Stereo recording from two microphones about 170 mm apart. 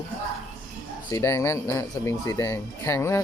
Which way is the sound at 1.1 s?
20° left (ahead or behind).